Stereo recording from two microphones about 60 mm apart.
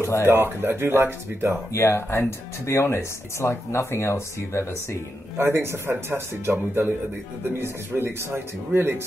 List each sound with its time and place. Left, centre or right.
0.0 s speech: left
0.3 s speech: right
1.7 s speech: left
5.4 s speech: right